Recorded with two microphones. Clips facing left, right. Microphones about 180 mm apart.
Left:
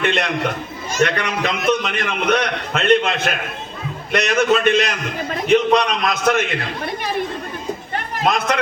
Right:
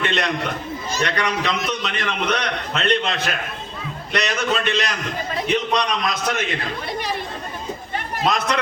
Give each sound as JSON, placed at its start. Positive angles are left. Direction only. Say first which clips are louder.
{"t": 0.0, "sound": "a man's voice", "louder": "left 3 dB", "side_deg": 50}
{"t": 8.2, "sound": "a man's voice", "louder": "left 2 dB", "side_deg": 50}